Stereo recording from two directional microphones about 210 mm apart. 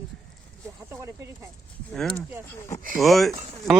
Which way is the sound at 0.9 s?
10° right (ahead or behind).